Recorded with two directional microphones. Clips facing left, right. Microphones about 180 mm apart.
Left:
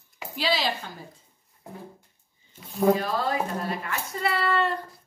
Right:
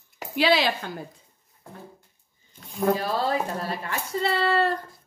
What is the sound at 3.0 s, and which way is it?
Speech, 30° right (ahead or behind).